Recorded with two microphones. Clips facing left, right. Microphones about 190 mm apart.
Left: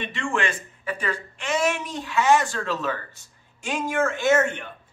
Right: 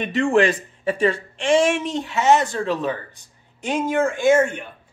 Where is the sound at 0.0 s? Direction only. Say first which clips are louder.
Right 9 dB; 40° right (ahead or behind).